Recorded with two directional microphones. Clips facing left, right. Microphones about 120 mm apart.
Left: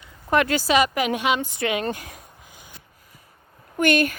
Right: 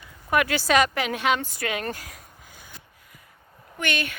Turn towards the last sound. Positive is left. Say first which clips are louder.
# left 9 dB
turn(degrees=45)  # may be behind; listen again after turning